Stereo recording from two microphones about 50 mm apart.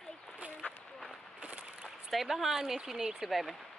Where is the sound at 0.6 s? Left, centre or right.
Left.